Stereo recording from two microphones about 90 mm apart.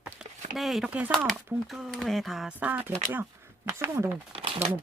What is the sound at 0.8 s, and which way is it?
Speech, 15° right (ahead or behind).